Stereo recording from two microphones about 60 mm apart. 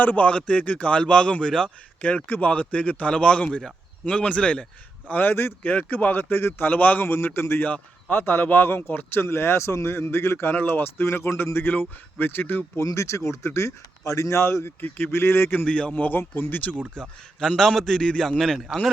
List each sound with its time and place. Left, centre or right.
0.0 s a man's voice: left
2.0 s speech: left
5.0 s speech: left
9.2 s a man's voice: left
12.8 s speech: left
14.8 s speech: left
15.6 s speech: left
16.9 s a man's voice: centre
18.3 s speech: centre